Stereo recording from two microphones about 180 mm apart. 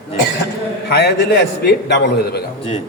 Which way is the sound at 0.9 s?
65° left (ahead or behind).